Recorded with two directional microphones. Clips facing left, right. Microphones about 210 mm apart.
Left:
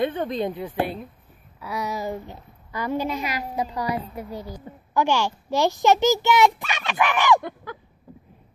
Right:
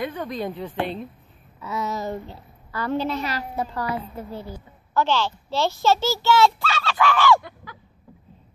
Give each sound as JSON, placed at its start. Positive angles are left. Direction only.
{"t": 0.0, "sound": "a woman's voice", "side_deg": 25}
{"t": 0.5, "sound": "a woman's voice", "side_deg": 15}